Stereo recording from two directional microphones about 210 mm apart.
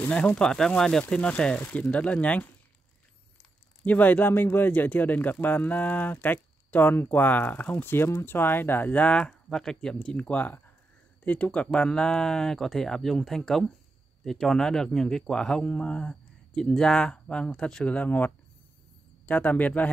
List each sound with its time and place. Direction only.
0.0 s speech: 5° left (ahead or behind)
3.8 s speech: 10° left (ahead or behind)